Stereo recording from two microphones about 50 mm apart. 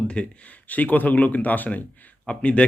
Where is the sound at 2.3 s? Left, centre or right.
Left.